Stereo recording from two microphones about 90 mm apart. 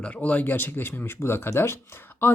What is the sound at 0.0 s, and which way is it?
Speech, 15° left (ahead or behind).